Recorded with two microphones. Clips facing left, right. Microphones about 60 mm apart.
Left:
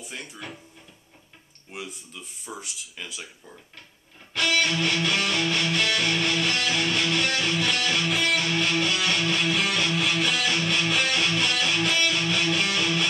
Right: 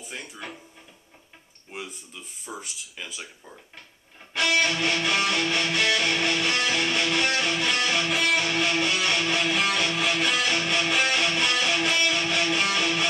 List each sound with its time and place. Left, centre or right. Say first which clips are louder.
0.0 s speech: even; centre
1.7 s speech: even; centre
4.3 s music: right 1 dB; centre
8.1 s music: even; centre
8.4 s music: even; centre
8.9 s speech: even; centre
10.4 s music: even; centre
11.2 s music: right 1 dB; centre